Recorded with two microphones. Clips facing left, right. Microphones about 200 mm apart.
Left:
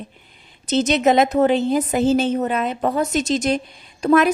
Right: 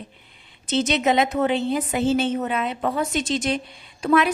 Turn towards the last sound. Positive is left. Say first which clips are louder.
# left 4 dB
turn(degrees=45)  # may be behind; listen again after turning